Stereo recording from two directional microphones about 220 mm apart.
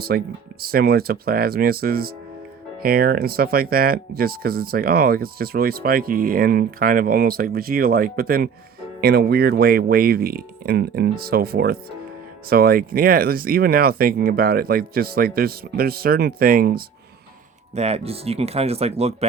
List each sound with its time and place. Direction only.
0.1 s speech: 45° right (ahead or behind)
17.7 s speech: 30° right (ahead or behind)